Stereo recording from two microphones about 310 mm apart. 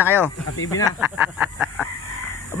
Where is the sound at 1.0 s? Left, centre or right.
Centre.